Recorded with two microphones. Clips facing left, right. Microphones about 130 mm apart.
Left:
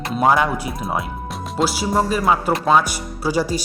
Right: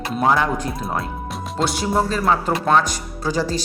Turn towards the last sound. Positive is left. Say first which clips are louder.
# left 2 dB
turn(degrees=10)  # may be behind; listen again after turning